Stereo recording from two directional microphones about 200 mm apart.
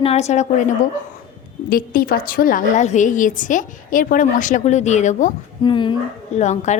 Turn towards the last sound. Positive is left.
turn(degrees=35)  # may be behind; listen again after turning